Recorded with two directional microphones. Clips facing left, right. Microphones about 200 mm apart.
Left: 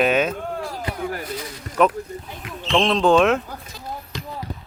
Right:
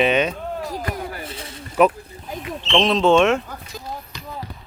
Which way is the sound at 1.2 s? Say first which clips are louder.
Left 4 dB; 25° right (ahead or behind).